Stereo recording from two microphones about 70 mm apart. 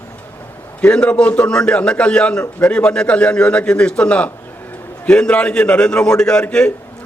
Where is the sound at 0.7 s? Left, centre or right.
Centre.